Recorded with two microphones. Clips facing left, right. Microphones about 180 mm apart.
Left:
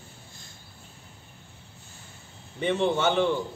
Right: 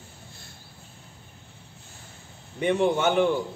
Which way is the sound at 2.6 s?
10° right (ahead or behind).